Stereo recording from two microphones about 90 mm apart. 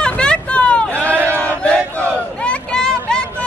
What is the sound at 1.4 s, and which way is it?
Battle cry, 15° left (ahead or behind).